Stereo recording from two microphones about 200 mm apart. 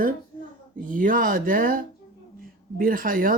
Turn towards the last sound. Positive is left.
turn(degrees=-45)  # may be behind; listen again after turning